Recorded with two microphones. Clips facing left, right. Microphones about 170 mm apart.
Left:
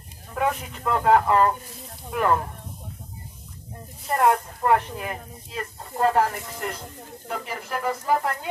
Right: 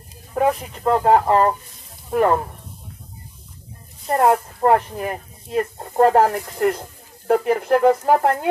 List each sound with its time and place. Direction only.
0.3 s speech: 35° right (ahead or behind)
4.0 s speech: 35° right (ahead or behind); by 8.4 s 60° right (ahead or behind)